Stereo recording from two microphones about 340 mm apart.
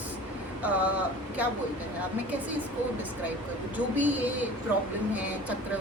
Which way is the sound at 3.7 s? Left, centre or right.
Centre.